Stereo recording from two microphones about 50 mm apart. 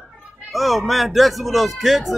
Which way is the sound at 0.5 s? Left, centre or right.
Centre.